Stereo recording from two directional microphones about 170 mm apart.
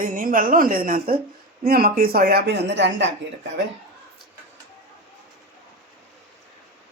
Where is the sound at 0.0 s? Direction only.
55° right (ahead or behind); by 3.1 s 90° right.